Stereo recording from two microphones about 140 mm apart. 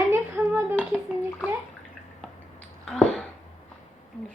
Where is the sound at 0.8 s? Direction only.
10° left (ahead or behind).